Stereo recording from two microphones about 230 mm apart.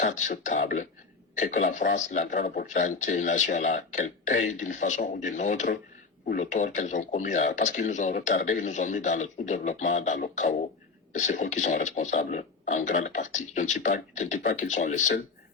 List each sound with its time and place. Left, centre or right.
0.0 s speech: left